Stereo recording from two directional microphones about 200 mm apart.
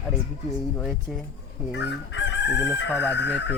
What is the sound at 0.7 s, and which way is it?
Speech, 5° left (ahead or behind).